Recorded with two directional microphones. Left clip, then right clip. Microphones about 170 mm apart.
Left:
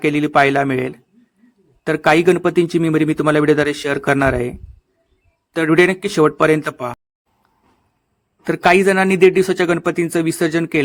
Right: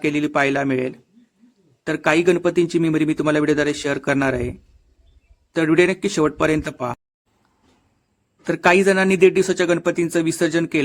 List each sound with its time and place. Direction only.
0.0 s speech: 20° left (ahead or behind)
5.5 s speech: 20° left (ahead or behind)
8.4 s a man's voice: 15° left (ahead or behind)